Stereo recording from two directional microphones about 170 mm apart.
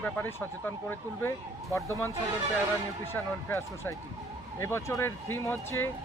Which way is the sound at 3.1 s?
15° left (ahead or behind).